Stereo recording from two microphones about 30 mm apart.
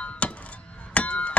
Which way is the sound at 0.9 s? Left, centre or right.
Left.